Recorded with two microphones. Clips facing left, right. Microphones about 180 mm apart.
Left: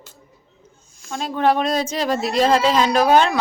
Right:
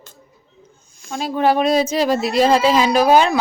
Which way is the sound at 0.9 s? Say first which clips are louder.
Right 3 dB; centre (ahead or behind).